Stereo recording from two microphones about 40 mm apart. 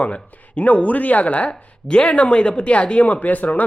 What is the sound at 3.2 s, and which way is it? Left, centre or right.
Speech, left.